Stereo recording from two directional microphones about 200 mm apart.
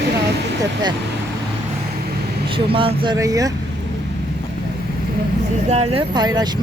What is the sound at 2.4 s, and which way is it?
Speech, 25° right (ahead or behind).